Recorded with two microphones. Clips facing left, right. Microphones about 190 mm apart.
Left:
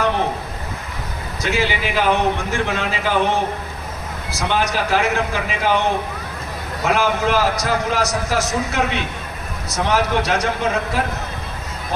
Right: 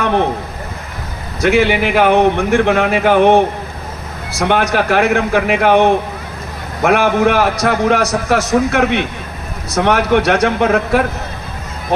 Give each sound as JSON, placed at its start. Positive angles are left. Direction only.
{"t": 1.4, "sound": "a man's voice", "side_deg": -60}